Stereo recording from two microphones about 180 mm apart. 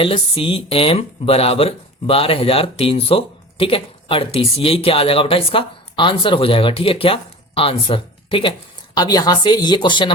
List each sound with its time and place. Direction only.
0.0 s speech: 30° left (ahead or behind)